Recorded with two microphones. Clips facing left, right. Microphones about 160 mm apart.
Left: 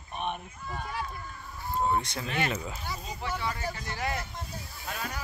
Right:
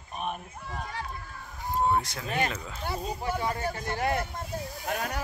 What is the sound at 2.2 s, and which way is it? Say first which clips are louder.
Speech: right 2 dB; 45° right (ahead or behind).